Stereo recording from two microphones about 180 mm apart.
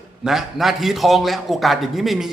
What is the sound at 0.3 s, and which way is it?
A man's voice, centre (ahead or behind).